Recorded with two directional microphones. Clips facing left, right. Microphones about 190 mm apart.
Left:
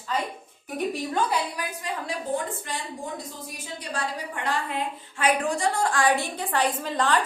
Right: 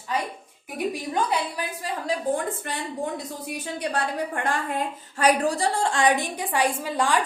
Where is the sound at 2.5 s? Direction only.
60° right (ahead or behind).